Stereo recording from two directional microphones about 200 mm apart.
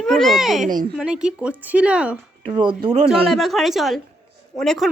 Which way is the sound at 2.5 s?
25° right (ahead or behind).